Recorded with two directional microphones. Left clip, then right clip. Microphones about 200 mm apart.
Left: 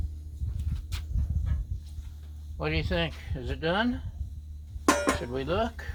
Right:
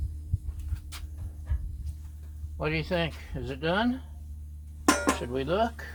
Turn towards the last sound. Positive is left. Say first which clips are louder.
# right 2 dB
turn(degrees=15)  # may be behind; listen again after turning